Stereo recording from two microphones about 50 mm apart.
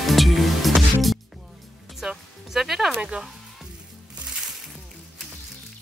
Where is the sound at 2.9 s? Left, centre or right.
Right.